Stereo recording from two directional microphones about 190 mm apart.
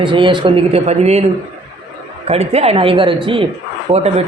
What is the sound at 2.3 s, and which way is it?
A man's voice, 35° right (ahead or behind).